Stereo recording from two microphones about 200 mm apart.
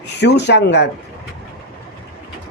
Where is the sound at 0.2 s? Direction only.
60° left (ahead or behind).